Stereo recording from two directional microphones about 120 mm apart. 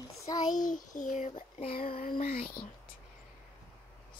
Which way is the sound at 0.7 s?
90° left.